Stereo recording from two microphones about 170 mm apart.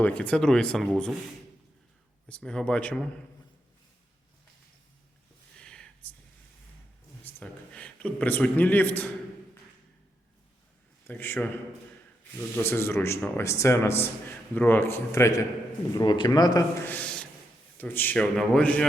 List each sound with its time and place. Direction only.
0.0 s speech: 5° left (ahead or behind)
2.3 s speech: 5° left (ahead or behind)
5.5 s a sound: 5° left (ahead or behind)
7.3 s a man's voice: 10° left (ahead or behind)
11.0 s a man's voice: 10° left (ahead or behind)
16.8 s a sound: 10° left (ahead or behind)
17.7 s a man's voice: 10° left (ahead or behind)